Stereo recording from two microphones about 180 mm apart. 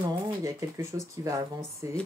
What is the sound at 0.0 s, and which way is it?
Speech, 15° right (ahead or behind).